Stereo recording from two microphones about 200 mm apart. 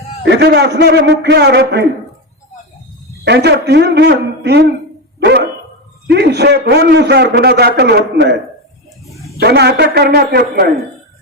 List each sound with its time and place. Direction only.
0.2 s a man's voice: 60° right (ahead or behind)
3.2 s a man's voice: 55° right (ahead or behind)
6.1 s a man's voice: 55° right (ahead or behind)
9.4 s a man's voice: 55° right (ahead or behind)